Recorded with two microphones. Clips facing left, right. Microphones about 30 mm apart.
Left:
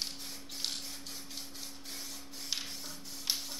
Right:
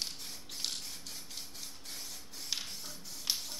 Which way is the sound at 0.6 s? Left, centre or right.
Centre.